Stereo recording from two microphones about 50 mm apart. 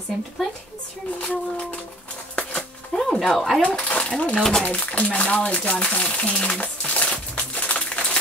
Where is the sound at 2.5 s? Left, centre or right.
Centre.